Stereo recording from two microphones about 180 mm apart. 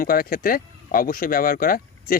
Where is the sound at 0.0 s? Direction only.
50° left (ahead or behind).